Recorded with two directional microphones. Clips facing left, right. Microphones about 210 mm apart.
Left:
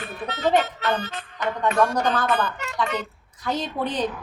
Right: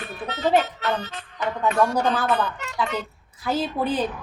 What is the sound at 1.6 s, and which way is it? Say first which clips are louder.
Speech: even; 5° right (ahead or behind).